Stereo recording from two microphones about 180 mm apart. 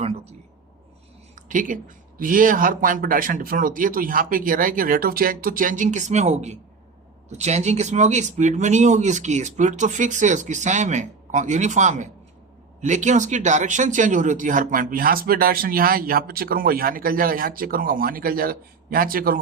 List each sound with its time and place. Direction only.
1.4 s speech: 45° right (ahead or behind)